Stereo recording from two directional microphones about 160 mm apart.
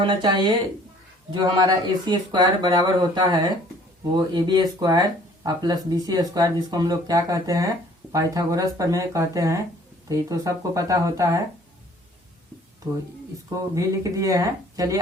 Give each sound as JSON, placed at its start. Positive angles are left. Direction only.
{"t": 0.0, "sound": "speech", "side_deg": -30}
{"t": 12.8, "sound": "speech", "side_deg": -25}